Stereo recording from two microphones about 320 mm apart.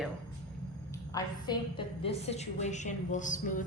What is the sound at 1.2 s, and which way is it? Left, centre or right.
A woman's voice, centre.